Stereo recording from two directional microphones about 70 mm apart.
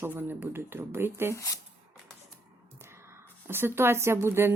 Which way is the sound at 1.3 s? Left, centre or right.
Left.